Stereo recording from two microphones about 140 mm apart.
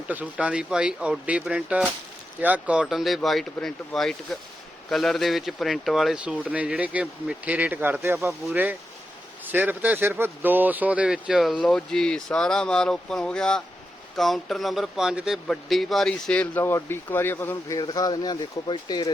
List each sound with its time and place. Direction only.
0.1 s speech: 10° right (ahead or behind)
9.4 s speech: 15° right (ahead or behind); by 17.7 s 15° left (ahead or behind)
17.7 s speech: 25° left (ahead or behind)